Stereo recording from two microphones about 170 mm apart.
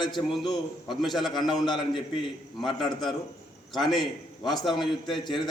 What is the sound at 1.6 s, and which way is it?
Speech, 25° left (ahead or behind).